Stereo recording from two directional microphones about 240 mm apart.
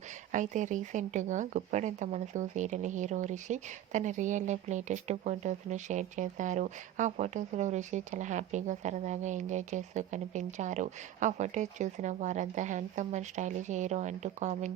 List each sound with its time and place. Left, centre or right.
0.3 s speech: right